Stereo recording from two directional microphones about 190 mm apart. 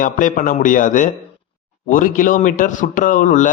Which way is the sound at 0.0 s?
45° left (ahead or behind).